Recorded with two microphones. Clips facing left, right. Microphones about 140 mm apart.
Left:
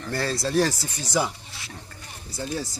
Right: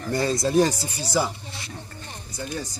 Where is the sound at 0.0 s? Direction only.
Centre (ahead or behind).